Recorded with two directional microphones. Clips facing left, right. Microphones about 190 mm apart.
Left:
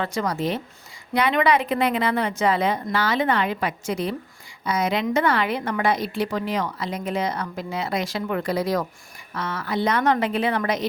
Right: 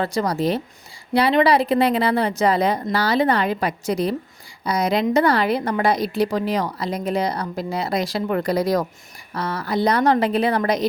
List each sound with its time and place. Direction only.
0.0 s a woman's voice: 35° right (ahead or behind)